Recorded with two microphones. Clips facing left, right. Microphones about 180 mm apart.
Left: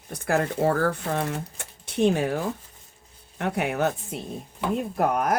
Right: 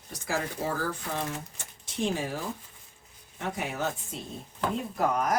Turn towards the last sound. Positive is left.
turn(degrees=60)  # may be behind; listen again after turning